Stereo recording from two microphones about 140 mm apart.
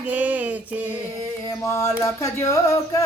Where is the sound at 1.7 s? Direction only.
20° left (ahead or behind).